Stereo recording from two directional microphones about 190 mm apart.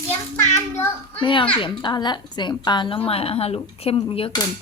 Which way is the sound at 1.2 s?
25° left (ahead or behind).